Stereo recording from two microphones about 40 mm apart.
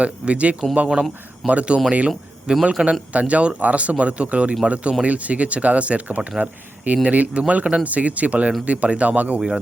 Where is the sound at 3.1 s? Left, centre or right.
Right.